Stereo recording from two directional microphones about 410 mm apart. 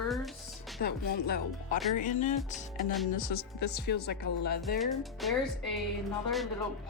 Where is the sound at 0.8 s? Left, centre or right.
Left.